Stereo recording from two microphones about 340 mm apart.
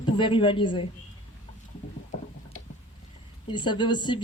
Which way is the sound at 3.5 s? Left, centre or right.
Centre.